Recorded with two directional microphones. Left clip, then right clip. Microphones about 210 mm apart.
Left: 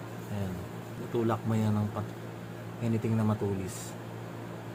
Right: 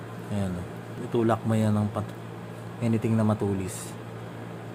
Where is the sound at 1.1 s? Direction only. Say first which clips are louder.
Right 6 dB; 25° right (ahead or behind).